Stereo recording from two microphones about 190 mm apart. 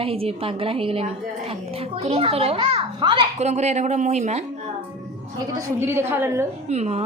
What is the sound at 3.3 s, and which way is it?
Speech, 35° right (ahead or behind).